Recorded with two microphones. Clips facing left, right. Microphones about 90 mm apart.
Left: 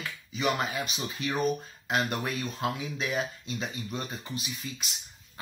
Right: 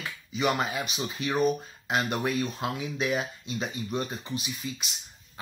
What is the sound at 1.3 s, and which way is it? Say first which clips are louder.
Speech: right 4 dB; 15° right (ahead or behind).